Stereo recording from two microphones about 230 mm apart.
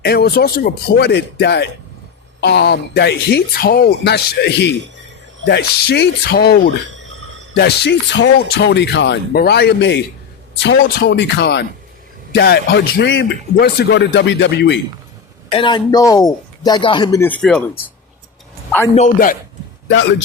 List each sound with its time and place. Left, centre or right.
0.0 s speech: left
6.8 s a sound: right
7.5 s speech: left
15.4 s a man's voice: left; by 17.6 s centre
18.9 s a man's voice: left
19.9 s speech: left